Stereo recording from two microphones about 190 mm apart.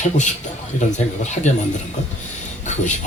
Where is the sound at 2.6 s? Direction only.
40° left (ahead or behind).